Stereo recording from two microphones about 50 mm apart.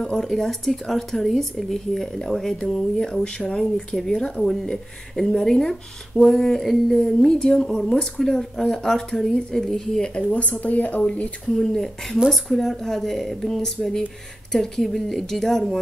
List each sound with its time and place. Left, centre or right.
0.0 s speech: centre
10.3 s speech: left
11.4 s speech: centre